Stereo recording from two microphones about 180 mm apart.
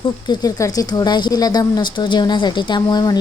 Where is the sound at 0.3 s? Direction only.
20° left (ahead or behind).